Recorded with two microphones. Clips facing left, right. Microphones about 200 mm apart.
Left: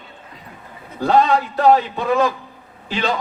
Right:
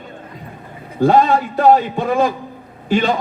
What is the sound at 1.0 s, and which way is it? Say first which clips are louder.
A man's voice: right 3 dB; 45° right (ahead or behind).